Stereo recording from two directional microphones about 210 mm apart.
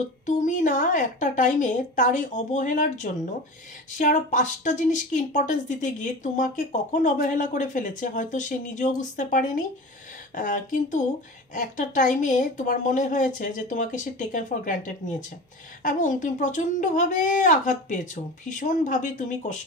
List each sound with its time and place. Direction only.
0.3 s a woman's voice: 35° left (ahead or behind)